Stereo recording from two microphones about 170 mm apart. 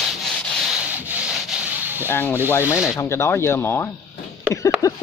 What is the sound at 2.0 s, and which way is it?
Speech, 10° left (ahead or behind).